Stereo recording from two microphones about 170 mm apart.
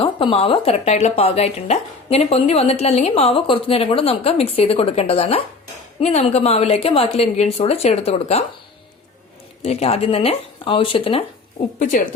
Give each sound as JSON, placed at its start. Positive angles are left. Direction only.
{"t": 0.0, "sound": "speech", "side_deg": 30}
{"t": 9.6, "sound": "speech", "side_deg": 35}
{"t": 11.8, "sound": "a woman's voice", "side_deg": 50}